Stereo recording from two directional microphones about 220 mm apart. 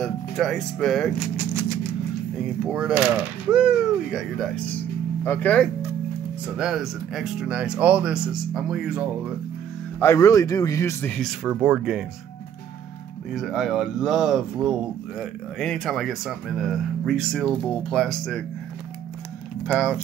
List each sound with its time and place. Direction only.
0.0 s speech: centre (ahead or behind)
6.4 s speech: 5° right (ahead or behind)
9.9 s a man's voice: 10° left (ahead or behind); by 12.0 s 5° right (ahead or behind)
13.3 s speech: centre (ahead or behind)
19.6 s speech: centre (ahead or behind)